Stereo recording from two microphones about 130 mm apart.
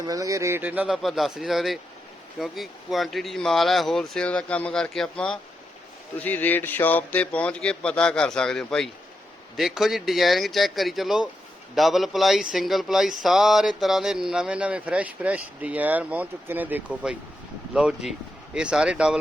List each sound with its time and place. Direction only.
0.0 s speech: 25° right (ahead or behind)
1.0 s speech: centre (ahead or behind)